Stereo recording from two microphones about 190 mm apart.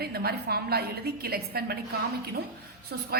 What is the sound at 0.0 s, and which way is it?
A woman's voice, 55° right (ahead or behind).